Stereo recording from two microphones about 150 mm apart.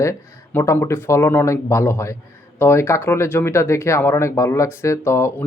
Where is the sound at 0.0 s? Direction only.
20° left (ahead or behind).